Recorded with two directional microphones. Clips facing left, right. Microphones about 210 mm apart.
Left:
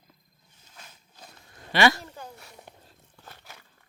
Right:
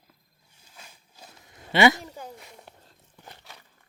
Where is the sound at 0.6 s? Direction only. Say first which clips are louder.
Even; 10° right (ahead or behind).